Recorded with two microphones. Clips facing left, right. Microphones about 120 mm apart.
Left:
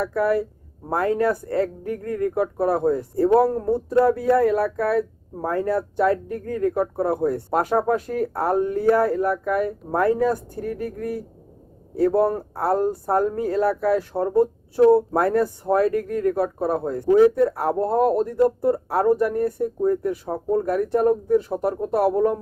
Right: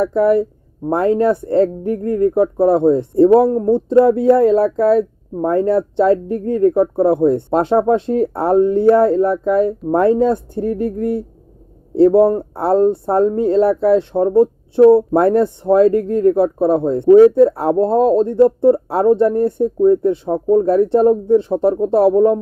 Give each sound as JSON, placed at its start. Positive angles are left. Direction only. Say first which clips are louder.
{"t": 0.0, "sound": "speech", "louder": "right 7 dB", "side_deg": -25}